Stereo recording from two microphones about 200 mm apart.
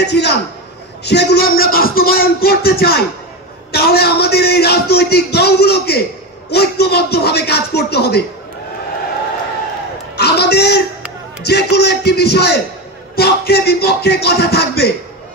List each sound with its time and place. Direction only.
0.0 s a man's voice: 55° left (ahead or behind)
10.1 s a sound: 55° left (ahead or behind)
11.4 s a man's voice: 55° left (ahead or behind)